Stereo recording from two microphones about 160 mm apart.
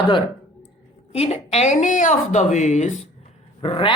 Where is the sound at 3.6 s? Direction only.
35° left (ahead or behind).